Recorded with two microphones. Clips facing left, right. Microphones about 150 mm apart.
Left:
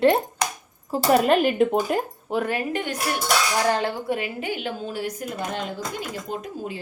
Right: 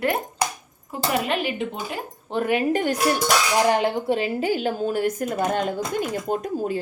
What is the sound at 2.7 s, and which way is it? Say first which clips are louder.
Speech: right 6 dB; 40° right (ahead or behind).